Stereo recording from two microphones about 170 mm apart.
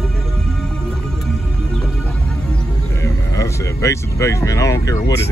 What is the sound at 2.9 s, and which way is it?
Vehicle, 20° left (ahead or behind).